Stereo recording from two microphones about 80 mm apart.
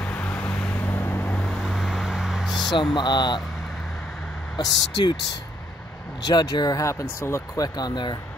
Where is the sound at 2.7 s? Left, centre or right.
Left.